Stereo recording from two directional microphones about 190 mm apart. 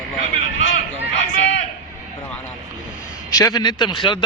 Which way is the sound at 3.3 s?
20° left (ahead or behind).